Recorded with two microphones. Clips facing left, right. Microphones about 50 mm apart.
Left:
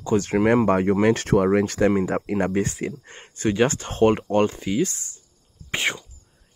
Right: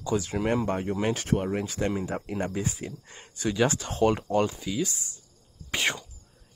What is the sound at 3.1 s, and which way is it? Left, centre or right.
Speech, left.